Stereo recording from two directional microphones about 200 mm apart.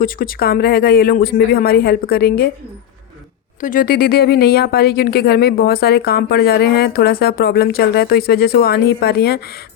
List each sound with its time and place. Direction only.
0.0 s speech: 45° left (ahead or behind)
3.6 s speech: 45° left (ahead or behind)